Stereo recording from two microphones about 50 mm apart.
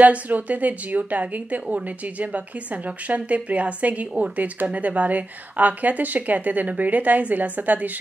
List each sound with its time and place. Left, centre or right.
0.0 s speech: right